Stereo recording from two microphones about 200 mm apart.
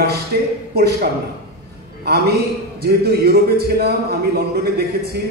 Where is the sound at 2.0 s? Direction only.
50° right (ahead or behind).